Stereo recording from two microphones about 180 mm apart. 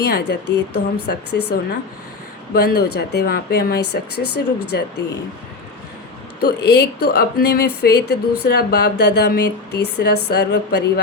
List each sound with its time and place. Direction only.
0.1 s speech: 70° left (ahead or behind)
6.4 s speech: 65° left (ahead or behind)